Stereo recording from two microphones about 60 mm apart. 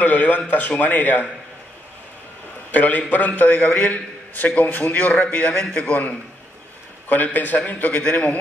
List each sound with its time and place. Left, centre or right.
0.0 s a man's voice: left
2.7 s a man's voice: left